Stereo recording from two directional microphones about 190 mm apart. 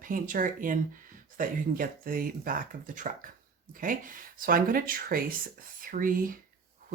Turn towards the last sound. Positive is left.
turn(degrees=-45)  # may be behind; listen again after turning